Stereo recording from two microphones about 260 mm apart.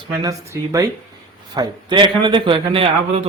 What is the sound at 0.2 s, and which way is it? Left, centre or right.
A man's voice, centre.